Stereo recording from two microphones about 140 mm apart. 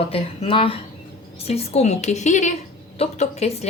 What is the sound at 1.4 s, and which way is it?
Speech, 50° left (ahead or behind).